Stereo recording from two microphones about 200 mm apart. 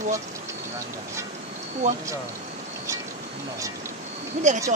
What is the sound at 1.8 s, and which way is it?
Speech, 35° right (ahead or behind).